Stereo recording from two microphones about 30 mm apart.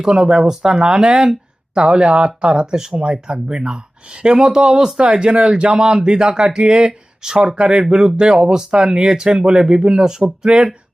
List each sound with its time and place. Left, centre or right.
0.0 s speech: right
2.1 s speech: right; by 8.8 s centre
8.8 s speech: right